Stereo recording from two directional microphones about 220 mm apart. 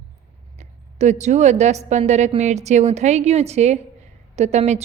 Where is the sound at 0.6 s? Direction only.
30° right (ahead or behind).